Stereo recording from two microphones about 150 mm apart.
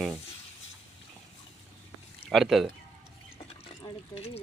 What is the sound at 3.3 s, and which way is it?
Water, 40° left (ahead or behind).